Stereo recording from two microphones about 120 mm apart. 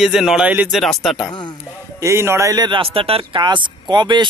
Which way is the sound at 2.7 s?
45° right (ahead or behind).